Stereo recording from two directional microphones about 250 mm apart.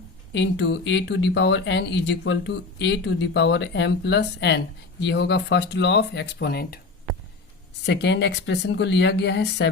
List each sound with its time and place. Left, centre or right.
0.3 s speech: left
7.9 s speech: left